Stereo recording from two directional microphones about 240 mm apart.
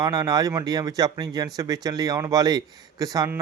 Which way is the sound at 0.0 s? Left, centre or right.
Centre.